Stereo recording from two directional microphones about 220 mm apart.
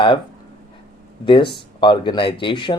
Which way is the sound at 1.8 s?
20° left (ahead or behind).